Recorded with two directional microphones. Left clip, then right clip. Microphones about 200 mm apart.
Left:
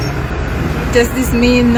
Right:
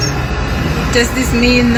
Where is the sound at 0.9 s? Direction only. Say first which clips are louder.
Left 1 dB; 15° left (ahead or behind).